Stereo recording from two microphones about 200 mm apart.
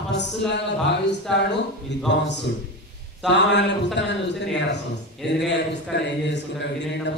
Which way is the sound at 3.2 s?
60° left (ahead or behind).